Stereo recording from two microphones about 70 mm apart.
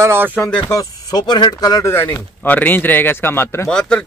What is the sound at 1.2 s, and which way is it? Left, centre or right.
Speech, left.